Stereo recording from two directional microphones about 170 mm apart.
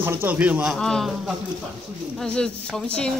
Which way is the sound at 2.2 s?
5° left (ahead or behind).